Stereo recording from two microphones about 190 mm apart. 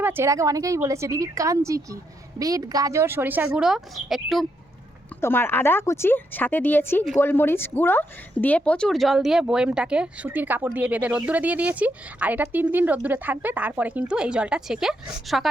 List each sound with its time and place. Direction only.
0.0 s speech: 10° right (ahead or behind)
5.2 s a woman's voice: 10° left (ahead or behind)